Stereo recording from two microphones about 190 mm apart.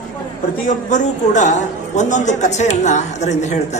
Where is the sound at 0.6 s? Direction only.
40° left (ahead or behind).